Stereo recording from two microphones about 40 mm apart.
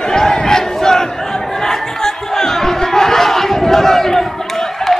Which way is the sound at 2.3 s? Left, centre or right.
Centre.